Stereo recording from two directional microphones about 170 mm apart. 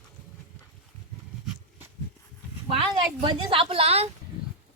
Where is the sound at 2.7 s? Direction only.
30° right (ahead or behind).